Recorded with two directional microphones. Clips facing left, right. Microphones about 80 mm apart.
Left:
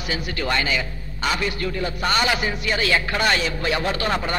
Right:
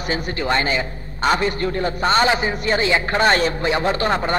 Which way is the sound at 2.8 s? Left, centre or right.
Right.